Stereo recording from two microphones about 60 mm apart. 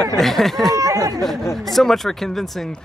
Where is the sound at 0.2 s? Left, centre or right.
Centre.